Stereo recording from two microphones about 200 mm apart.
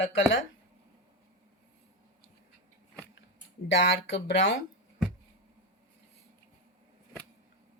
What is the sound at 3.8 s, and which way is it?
Speech, 65° left (ahead or behind).